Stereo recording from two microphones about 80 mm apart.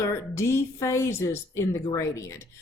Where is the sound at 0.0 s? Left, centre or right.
Left.